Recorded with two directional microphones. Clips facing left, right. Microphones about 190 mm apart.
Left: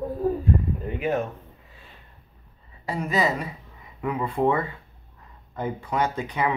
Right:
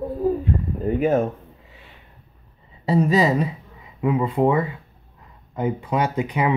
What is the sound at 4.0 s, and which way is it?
Speech, 20° right (ahead or behind).